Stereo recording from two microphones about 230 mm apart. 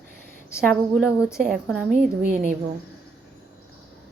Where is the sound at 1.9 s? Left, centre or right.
Right.